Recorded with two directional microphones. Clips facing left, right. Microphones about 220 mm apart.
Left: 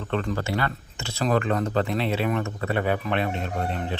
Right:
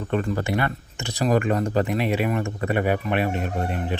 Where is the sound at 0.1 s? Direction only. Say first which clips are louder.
Right 2 dB; 15° right (ahead or behind).